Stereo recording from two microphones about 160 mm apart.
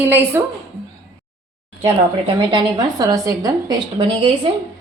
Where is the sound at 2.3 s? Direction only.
25° right (ahead or behind).